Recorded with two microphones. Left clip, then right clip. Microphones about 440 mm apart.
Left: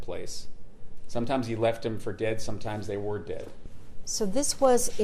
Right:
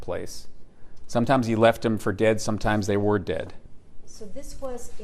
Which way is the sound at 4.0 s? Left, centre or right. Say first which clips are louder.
Left 13 dB; left.